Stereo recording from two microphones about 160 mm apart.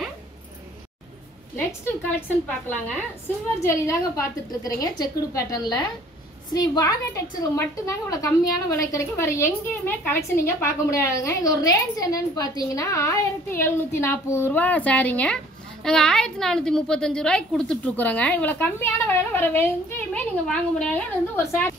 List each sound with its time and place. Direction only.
1.7 s a woman's voice: 15° left (ahead or behind)
21.4 s a woman's voice: 15° left (ahead or behind)